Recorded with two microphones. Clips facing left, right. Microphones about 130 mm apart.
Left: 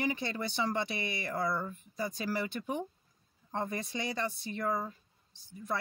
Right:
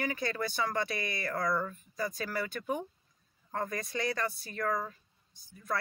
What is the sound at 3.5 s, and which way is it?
Speech, 25° left (ahead or behind).